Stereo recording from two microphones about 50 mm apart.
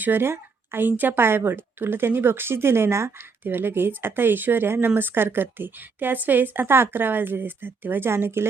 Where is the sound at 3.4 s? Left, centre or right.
Right.